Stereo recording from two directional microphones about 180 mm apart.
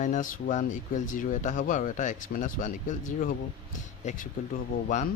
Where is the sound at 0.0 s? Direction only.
45° left (ahead or behind).